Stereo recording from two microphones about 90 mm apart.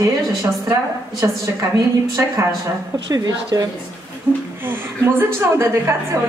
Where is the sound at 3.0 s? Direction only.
45° right (ahead or behind).